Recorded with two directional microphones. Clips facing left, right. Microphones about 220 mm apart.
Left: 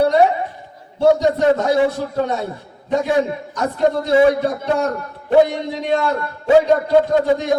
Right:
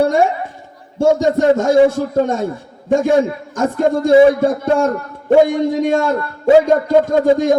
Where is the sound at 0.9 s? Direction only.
45° right (ahead or behind).